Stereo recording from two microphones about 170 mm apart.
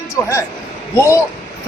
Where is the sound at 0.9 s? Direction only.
15° left (ahead or behind).